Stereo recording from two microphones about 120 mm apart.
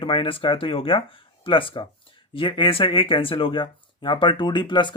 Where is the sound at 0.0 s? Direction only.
45° left (ahead or behind).